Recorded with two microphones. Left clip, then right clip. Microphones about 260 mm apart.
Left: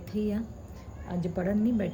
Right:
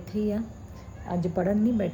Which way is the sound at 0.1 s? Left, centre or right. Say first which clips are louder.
Right 3 dB; centre.